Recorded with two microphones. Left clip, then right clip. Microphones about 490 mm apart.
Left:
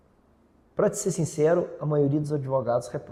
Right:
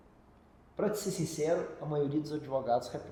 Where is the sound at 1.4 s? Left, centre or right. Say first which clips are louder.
Left 9 dB; left.